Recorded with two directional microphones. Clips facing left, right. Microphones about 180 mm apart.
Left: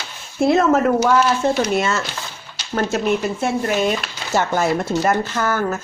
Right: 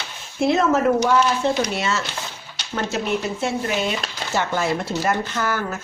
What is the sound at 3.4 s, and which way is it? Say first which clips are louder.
Speech: left 4 dB; 45° left (ahead or behind).